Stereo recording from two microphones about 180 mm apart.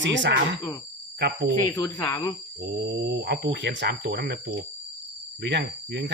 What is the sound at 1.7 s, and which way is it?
Speech, 20° left (ahead or behind).